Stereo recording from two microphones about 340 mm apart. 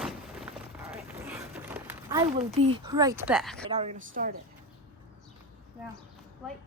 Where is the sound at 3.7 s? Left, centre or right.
Centre.